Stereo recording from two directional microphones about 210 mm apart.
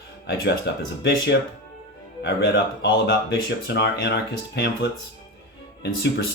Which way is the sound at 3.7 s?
55° left (ahead or behind).